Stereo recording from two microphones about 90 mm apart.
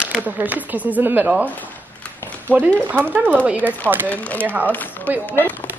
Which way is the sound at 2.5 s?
20° left (ahead or behind).